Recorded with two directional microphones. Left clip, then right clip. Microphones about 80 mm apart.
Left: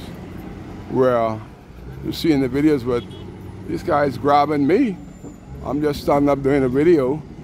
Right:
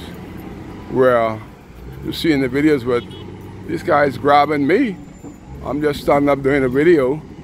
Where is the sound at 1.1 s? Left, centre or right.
Left.